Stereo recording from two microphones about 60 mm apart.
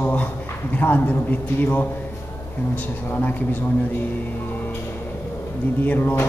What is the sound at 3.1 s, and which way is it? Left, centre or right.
Music, left.